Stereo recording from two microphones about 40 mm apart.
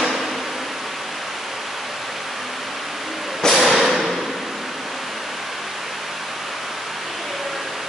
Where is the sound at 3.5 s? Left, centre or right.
Centre.